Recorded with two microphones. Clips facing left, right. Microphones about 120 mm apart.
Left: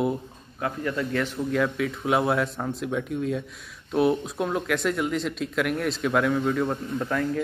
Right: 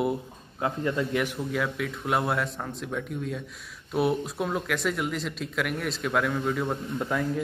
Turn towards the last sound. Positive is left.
turn(degrees=-5)  # may be behind; listen again after turning